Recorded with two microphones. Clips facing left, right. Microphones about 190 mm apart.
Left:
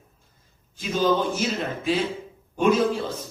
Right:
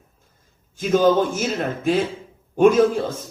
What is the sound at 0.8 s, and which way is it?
A man's voice, 50° right (ahead or behind).